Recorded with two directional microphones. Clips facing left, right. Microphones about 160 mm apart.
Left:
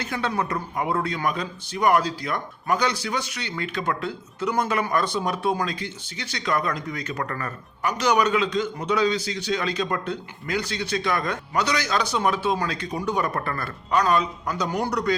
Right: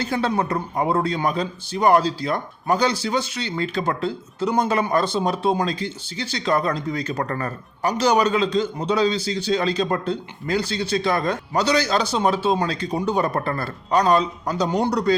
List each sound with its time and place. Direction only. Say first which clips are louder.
0.0 s a man's voice: right 4 dB; 30° right (ahead or behind)